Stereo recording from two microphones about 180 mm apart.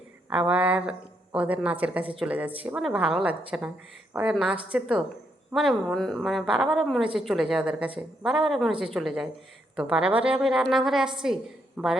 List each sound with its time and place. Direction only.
0.3 s a woman's voice: 5° right (ahead or behind)